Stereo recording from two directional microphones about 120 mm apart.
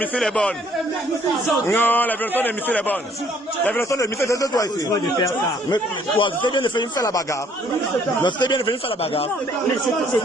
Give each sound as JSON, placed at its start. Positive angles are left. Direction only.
{"t": 0.2, "sound": "a man's voice", "side_deg": 5}
{"t": 1.6, "sound": "a man's voice", "side_deg": 15}
{"t": 3.9, "sound": "speech", "side_deg": 25}
{"t": 5.7, "sound": "a man's voice", "side_deg": 40}
{"t": 8.2, "sound": "a man's voice", "side_deg": 40}